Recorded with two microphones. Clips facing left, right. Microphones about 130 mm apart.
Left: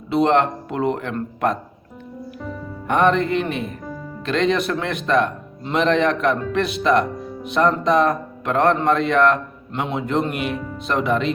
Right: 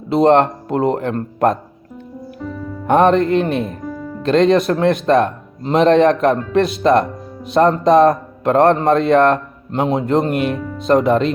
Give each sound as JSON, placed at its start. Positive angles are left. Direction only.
{"t": 0.1, "sound": "a man's voice", "side_deg": -40}
{"t": 2.8, "sound": "a man's voice", "side_deg": -40}